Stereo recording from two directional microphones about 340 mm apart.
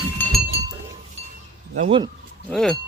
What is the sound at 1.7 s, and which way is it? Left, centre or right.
Speech, centre.